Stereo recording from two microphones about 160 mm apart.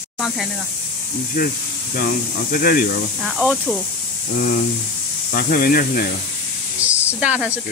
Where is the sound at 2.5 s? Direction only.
65° left (ahead or behind).